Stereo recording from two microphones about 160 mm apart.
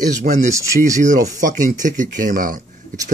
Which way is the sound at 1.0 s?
50° right (ahead or behind).